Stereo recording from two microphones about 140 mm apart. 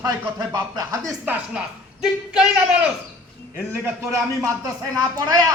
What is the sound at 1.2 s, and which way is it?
A woman's voice, 10° right (ahead or behind).